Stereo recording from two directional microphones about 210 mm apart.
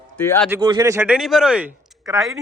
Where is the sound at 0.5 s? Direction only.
15° right (ahead or behind); by 2.4 s centre (ahead or behind).